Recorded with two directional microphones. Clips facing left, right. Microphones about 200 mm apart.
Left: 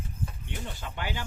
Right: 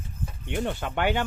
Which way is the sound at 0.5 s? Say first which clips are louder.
Right 10 dB; 65° right (ahead or behind).